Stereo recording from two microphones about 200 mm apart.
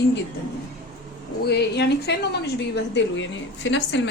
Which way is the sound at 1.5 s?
55° left (ahead or behind).